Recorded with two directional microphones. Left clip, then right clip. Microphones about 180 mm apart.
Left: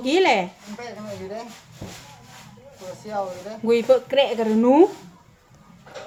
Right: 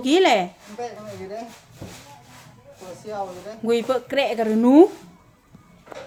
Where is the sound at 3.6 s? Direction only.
20° right (ahead or behind).